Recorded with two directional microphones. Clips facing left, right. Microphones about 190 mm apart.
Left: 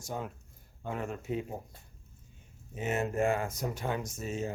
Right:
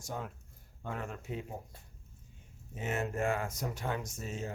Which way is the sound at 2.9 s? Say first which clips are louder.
Left 4 dB; 25° left (ahead or behind).